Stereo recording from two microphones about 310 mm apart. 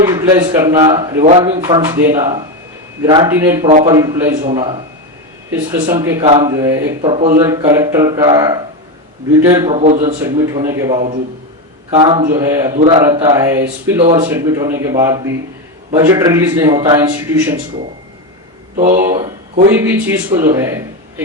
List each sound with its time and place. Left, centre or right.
0.0 s speech: centre
10.0 s speech: centre
18.9 s speech: centre